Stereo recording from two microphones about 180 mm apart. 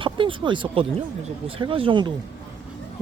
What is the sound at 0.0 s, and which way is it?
A man's voice, 30° right (ahead or behind).